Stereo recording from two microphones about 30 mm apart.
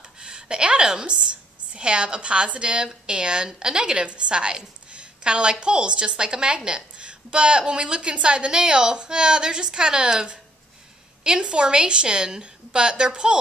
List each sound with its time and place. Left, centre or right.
0.0 s a sound: right
1.7 s a woman's voice: right
11.2 s a woman's voice: right